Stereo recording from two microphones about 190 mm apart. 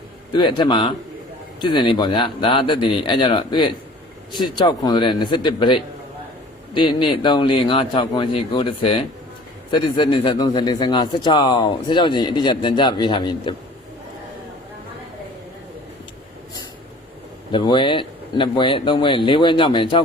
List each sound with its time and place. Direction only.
0.3 s speech: 25° left (ahead or behind)
17.5 s speech: 25° left (ahead or behind)